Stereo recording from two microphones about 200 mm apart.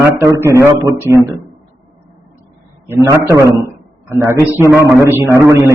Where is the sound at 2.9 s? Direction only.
15° right (ahead or behind).